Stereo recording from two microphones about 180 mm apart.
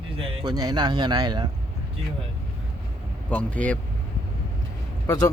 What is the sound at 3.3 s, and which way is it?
Speech, 10° left (ahead or behind).